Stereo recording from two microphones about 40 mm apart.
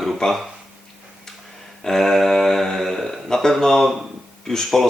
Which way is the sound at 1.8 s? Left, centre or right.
Centre.